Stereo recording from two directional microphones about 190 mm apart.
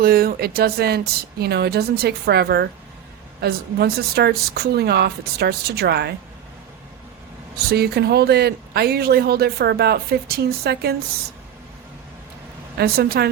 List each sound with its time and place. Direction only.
0.0 s speech: 50° right (ahead or behind)
7.7 s speech: 55° right (ahead or behind)
12.7 s speech: 55° right (ahead or behind)